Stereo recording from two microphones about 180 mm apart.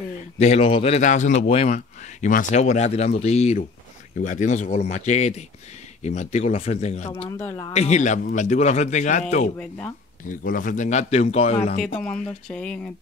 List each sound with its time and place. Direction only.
0.4 s a man's voice: 35° left (ahead or behind)
7.2 s a woman's voice: 15° left (ahead or behind)
7.7 s a man's voice: 40° left (ahead or behind)
9.6 s speech: 10° left (ahead or behind)
10.2 s a man's voice: 50° left (ahead or behind)
12.0 s speech: 5° left (ahead or behind)